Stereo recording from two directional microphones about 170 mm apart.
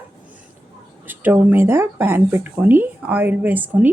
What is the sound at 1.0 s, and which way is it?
Speech, 10° right (ahead or behind).